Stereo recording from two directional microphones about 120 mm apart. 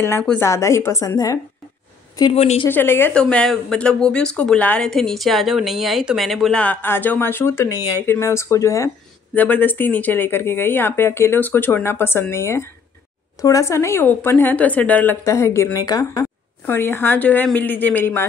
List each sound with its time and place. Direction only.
0.4 s speech: 25° left (ahead or behind)
2.3 s a woman's voice: 60° left (ahead or behind)
2.7 s speech: 20° left (ahead or behind)
3.2 s speech: 10° left (ahead or behind)
6.6 s speech: 15° left (ahead or behind)
9.3 s speech: 15° left (ahead or behind)
15.2 s speech: 25° left (ahead or behind)
16.6 s speech: 20° left (ahead or behind)